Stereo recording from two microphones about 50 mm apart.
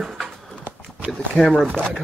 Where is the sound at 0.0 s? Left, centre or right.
Centre.